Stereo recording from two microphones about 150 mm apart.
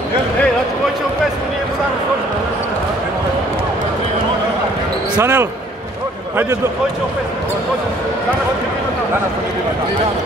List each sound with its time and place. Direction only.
5.1 s speech: 15° right (ahead or behind)